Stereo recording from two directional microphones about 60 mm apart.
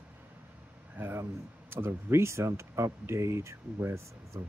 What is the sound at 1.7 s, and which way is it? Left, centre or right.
Speech, right.